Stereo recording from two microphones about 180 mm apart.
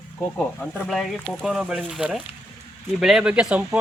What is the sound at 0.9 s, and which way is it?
Speech, centre (ahead or behind).